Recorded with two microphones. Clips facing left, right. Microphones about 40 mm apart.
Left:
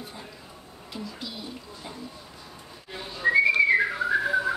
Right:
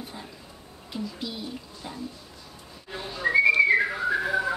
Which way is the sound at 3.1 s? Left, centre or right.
Centre.